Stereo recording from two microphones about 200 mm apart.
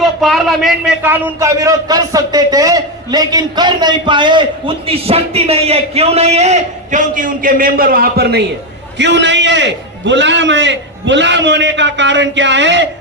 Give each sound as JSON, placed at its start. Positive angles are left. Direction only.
{"t": 0.0, "sound": "a man's voice", "side_deg": 0}
{"t": 1.0, "sound": "a man's voice", "side_deg": -15}
{"t": 9.0, "sound": "a man's voice", "side_deg": -60}